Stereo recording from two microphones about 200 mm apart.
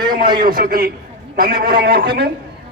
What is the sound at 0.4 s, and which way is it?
A man's voice, 45° right (ahead or behind).